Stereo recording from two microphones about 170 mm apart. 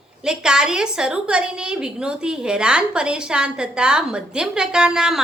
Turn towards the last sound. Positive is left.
turn(degrees=-5)  # may be behind; listen again after turning